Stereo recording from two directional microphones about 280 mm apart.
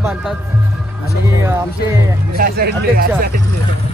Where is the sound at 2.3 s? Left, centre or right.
Right.